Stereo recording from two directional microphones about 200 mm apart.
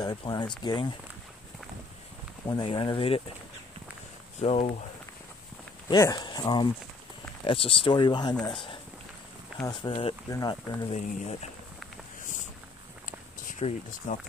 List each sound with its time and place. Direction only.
0.0 s speech: 20° left (ahead or behind)
2.4 s speech: 25° left (ahead or behind)
4.4 s speech: 30° left (ahead or behind)
5.9 s speech: 20° left (ahead or behind)
10.9 s speech: 30° left (ahead or behind)
13.0 s walk: 40° left (ahead or behind)